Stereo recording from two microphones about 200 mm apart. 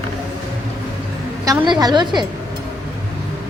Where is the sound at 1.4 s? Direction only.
20° right (ahead or behind).